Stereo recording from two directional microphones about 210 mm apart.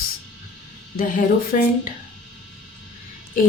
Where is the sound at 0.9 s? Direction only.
40° left (ahead or behind).